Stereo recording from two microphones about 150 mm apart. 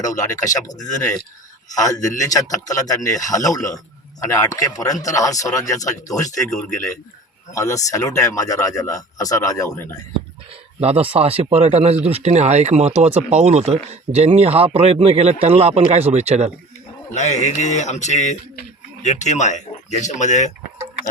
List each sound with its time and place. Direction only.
0.4 s a man's voice: 25° left (ahead or behind)
7.5 s a man's voice: 20° left (ahead or behind)
10.8 s speech: 40° right (ahead or behind)
17.1 s speech: 50° left (ahead or behind)